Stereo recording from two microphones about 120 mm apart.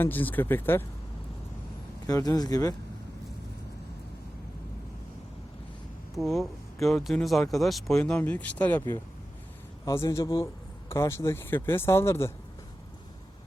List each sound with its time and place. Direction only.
0.0 s speech: 15° left (ahead or behind)
2.0 s speech: 30° left (ahead or behind)
6.1 s speech: centre (ahead or behind); by 12.3 s 20° left (ahead or behind)